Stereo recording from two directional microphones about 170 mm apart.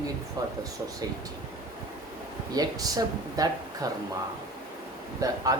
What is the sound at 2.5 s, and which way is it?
Speech, 20° right (ahead or behind).